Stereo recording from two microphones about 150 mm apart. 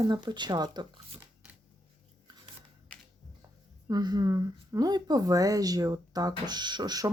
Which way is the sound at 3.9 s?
25° right (ahead or behind).